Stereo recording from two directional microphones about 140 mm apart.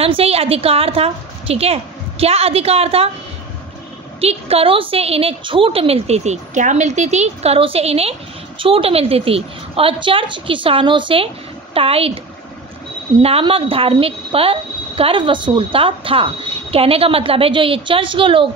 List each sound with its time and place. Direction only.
0.0 s a woman's voice: 45° right (ahead or behind)
4.2 s a woman's voice: 45° right (ahead or behind)
13.2 s a woman's voice: 40° right (ahead or behind)